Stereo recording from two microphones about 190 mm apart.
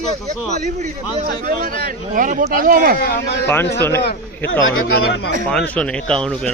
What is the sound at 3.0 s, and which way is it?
Speech, 60° left (ahead or behind).